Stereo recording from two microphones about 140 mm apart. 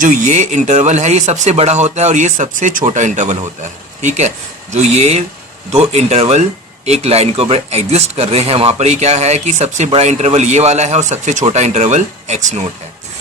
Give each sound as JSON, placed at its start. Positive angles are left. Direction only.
{"t": 0.0, "sound": "speech", "side_deg": -65}